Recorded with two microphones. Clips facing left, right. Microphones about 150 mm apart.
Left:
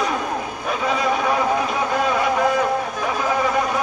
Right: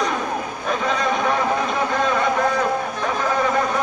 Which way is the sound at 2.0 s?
10° left (ahead or behind).